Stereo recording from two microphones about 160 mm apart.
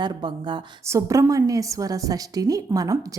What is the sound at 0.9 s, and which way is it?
A woman's voice, 20° right (ahead or behind).